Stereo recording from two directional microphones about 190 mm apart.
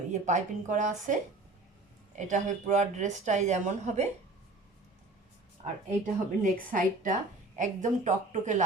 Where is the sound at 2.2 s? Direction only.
40° right (ahead or behind).